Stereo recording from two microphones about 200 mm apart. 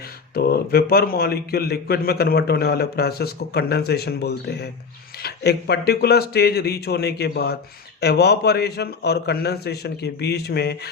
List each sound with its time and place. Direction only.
0.3 s a man's voice: 50° left (ahead or behind)